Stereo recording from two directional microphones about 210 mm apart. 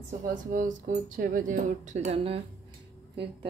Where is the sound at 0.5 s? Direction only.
40° right (ahead or behind).